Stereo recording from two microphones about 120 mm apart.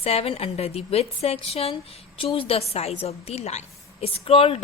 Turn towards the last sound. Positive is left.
turn(degrees=50)  # may be behind; listen again after turning